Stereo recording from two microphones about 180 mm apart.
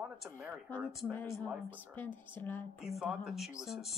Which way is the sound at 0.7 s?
10° left (ahead or behind).